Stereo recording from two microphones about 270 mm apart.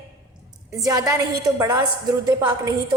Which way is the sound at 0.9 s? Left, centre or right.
Centre.